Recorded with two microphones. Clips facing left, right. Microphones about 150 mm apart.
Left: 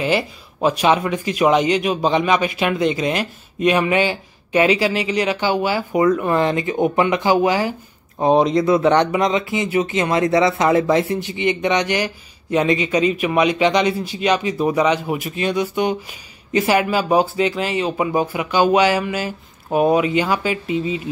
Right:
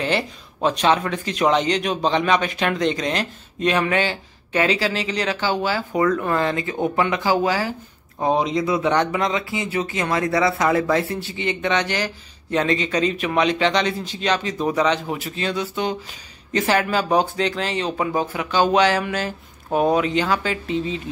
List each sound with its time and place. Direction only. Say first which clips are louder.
0.0 s speech: left 3 dB; 10° left (ahead or behind)
8.5 s speech: left 5 dB; 50° left (ahead or behind)
8.8 s speech: left 4 dB; 20° left (ahead or behind)